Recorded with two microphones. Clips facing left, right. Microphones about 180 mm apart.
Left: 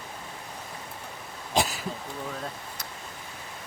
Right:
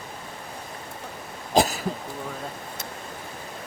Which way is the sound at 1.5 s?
40° right (ahead or behind).